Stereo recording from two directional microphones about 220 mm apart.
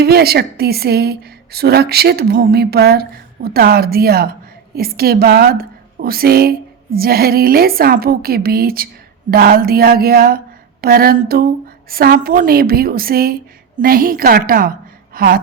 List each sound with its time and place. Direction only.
0.0 s a woman's voice: 45° right (ahead or behind)
15.1 s gasp: 40° right (ahead or behind)